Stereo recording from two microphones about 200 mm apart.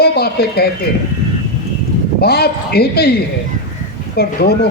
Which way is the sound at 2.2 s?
50° left (ahead or behind).